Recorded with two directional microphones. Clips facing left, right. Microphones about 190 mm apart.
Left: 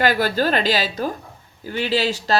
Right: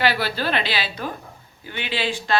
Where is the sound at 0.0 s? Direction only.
45° left (ahead or behind).